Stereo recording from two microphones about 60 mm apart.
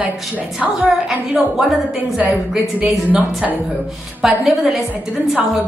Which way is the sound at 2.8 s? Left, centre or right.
Right.